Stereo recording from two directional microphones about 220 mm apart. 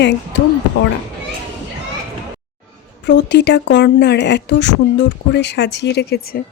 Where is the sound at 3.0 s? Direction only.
50° left (ahead or behind).